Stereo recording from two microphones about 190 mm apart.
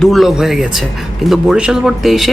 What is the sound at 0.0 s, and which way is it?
Speech, centre (ahead or behind).